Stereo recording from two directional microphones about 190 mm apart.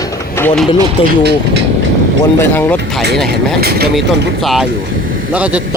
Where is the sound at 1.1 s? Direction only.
60° right (ahead or behind).